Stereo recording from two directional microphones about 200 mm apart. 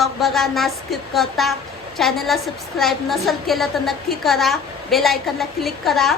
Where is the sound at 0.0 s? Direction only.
Centre (ahead or behind).